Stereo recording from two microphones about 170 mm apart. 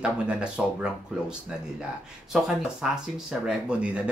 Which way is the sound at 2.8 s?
5° right (ahead or behind).